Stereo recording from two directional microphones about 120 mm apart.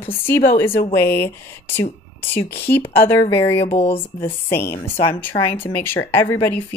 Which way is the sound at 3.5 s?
55° left (ahead or behind).